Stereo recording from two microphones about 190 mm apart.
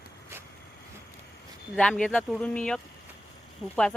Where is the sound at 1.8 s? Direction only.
5° left (ahead or behind).